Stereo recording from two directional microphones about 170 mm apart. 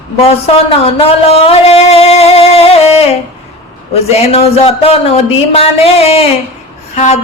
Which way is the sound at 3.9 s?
35° left (ahead or behind).